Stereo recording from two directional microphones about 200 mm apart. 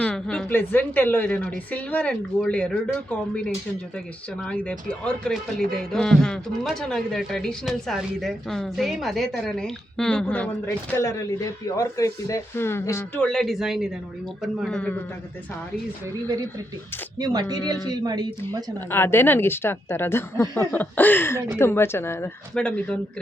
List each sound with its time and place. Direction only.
0.0 s a woman's voice: 5° left (ahead or behind)
16.0 s speech: 15° right (ahead or behind)
18.9 s a woman's voice: 10° left (ahead or behind)